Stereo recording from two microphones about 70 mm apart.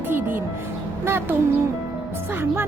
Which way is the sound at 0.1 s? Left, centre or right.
Right.